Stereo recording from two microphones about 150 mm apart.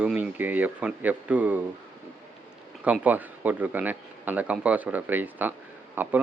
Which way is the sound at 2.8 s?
10° right (ahead or behind).